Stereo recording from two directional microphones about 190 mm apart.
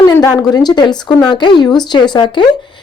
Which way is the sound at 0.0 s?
20° left (ahead or behind).